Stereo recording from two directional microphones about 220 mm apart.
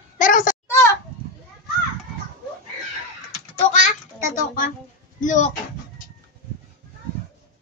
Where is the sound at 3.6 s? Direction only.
35° left (ahead or behind).